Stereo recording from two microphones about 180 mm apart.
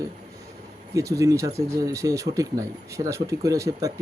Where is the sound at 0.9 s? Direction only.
15° right (ahead or behind).